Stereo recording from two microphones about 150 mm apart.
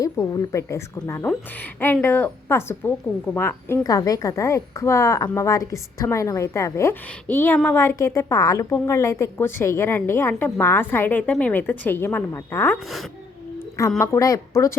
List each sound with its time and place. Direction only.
0.0 s a woman's voice: 25° left (ahead or behind)
13.6 s a sound: 20° left (ahead or behind)
14.0 s a woman's voice: 20° left (ahead or behind)